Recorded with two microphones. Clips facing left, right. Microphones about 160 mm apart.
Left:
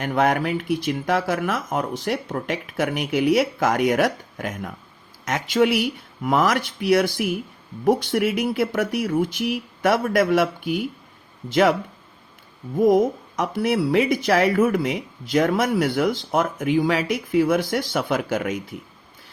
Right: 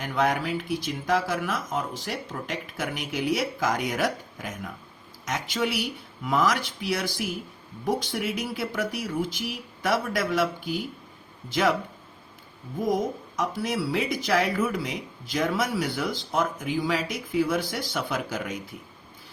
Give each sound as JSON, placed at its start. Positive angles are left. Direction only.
{"t": 0.0, "sound": "speech", "side_deg": 55}
{"t": 12.8, "sound": "speech", "side_deg": 60}